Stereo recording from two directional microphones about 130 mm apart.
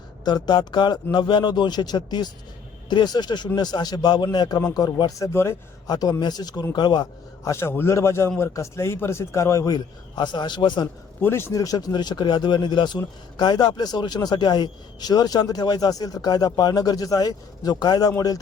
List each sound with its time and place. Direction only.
0.3 s a man's voice: 35° left (ahead or behind)
5.9 s a man's voice: 30° left (ahead or behind)
7.5 s a man's voice: 20° left (ahead or behind); by 10.8 s 35° left (ahead or behind)
11.2 s a man's voice: 20° left (ahead or behind)